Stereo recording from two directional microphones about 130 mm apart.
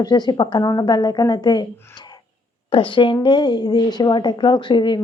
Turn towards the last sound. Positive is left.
turn(degrees=35)  # may be behind; listen again after turning